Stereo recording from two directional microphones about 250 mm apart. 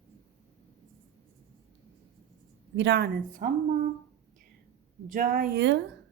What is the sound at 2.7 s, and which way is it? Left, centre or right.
Speech, right.